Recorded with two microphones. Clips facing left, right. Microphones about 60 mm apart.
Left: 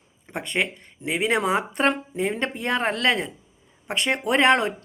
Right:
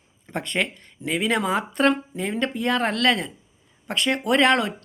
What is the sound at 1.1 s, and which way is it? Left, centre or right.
Speech, left.